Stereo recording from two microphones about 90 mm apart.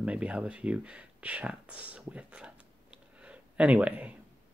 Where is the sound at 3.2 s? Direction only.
10° right (ahead or behind).